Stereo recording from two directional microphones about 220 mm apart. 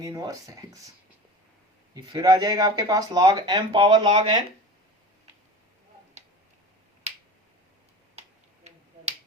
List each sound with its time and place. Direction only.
0.0 s speech: 15° right (ahead or behind)
1.9 s speech: 20° right (ahead or behind)